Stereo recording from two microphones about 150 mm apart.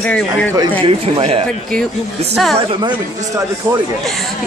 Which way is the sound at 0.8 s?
40° right (ahead or behind).